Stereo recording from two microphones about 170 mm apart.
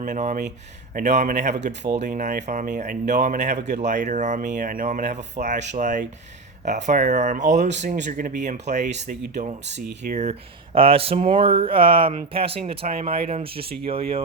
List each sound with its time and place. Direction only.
0.0 s speech: 45° right (ahead or behind)